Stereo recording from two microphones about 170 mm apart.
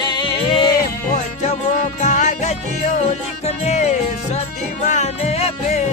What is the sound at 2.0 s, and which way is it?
Music, 45° left (ahead or behind).